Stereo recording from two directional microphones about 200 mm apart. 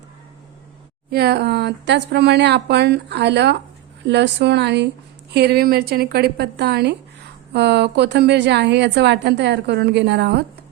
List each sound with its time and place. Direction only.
1.1 s a woman's voice: 55° right (ahead or behind)